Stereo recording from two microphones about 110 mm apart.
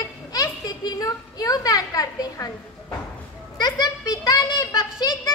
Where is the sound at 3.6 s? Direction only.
40° left (ahead or behind).